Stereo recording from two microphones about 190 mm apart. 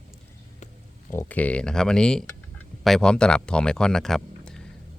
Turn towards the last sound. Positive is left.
turn(degrees=5)  # may be behind; listen again after turning